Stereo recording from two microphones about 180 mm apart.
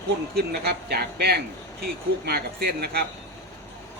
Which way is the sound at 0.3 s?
65° right (ahead or behind).